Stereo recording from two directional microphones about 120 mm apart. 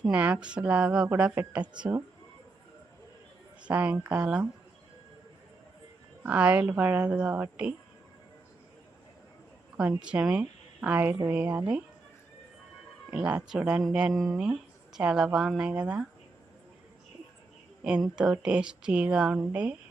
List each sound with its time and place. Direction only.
0.0 s speech: 10° right (ahead or behind)
3.6 s speech: 10° right (ahead or behind)
6.2 s speech: 10° right (ahead or behind)
10.0 s speech: 10° right (ahead or behind)
13.1 s a woman's voice: 10° right (ahead or behind)
18.2 s speech: 5° right (ahead or behind)